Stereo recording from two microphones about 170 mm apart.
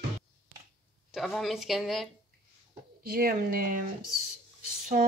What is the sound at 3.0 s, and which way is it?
Speech, 65° right (ahead or behind).